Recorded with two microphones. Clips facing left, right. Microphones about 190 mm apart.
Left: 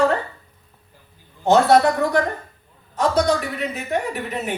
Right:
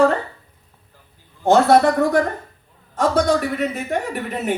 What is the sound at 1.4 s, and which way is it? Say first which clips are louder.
A man's voice: right 1 dB; 50° right (ahead or behind).